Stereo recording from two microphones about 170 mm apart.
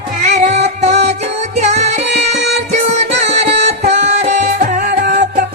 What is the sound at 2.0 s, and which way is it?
Music, 80° right.